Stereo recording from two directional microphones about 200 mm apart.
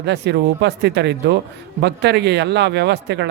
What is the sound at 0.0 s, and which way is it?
Speech, 60° right (ahead or behind).